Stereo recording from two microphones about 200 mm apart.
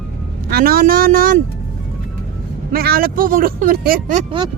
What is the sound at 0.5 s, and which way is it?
Speech, 50° right (ahead or behind).